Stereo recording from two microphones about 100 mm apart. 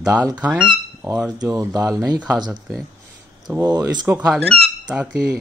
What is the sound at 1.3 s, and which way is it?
Speech, 35° right (ahead or behind).